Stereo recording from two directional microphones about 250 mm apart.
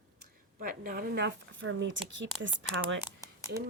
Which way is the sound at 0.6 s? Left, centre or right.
Right.